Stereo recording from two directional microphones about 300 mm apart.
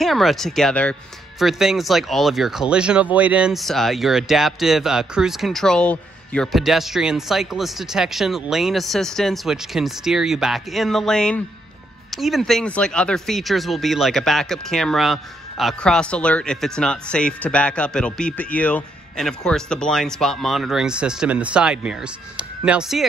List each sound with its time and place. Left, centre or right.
0.0 s speech: centre